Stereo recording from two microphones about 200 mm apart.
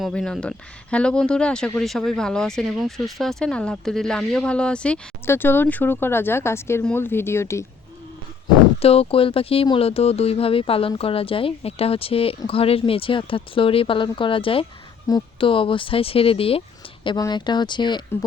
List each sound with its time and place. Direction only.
0.0 s speech: 5° left (ahead or behind)
8.8 s speech: 30° left (ahead or behind)